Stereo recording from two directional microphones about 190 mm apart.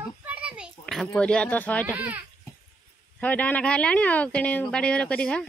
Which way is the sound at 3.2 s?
10° left (ahead or behind).